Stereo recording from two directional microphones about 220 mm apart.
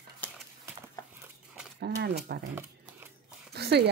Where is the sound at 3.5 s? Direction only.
45° right (ahead or behind).